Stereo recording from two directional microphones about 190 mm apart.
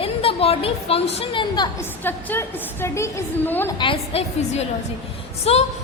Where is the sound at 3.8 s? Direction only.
30° left (ahead or behind).